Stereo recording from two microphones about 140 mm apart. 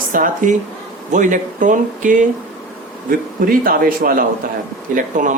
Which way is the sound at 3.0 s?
90° right.